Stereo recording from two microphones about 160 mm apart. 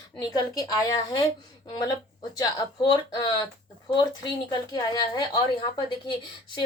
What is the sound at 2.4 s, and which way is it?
A woman's voice, 25° left (ahead or behind).